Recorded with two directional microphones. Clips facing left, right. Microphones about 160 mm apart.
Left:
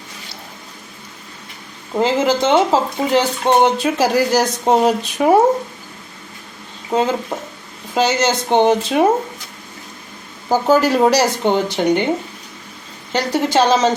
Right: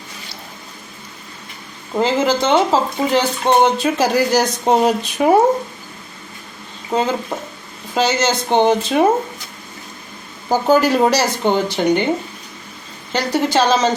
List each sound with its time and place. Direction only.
2.0 s speech: 15° left (ahead or behind); by 5.4 s centre (ahead or behind)
6.9 s speech: 15° left (ahead or behind)
10.5 s speech: 5° left (ahead or behind)
11.1 s speech: 15° left (ahead or behind)
13.1 s a woman's voice: 20° left (ahead or behind)